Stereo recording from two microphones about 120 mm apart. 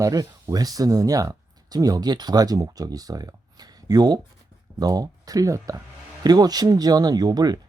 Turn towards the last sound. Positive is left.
turn(degrees=-35)  # may be behind; listen again after turning